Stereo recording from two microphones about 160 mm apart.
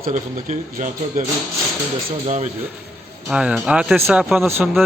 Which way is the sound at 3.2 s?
5° right (ahead or behind).